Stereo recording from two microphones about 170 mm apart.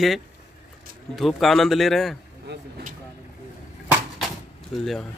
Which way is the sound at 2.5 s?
90° right.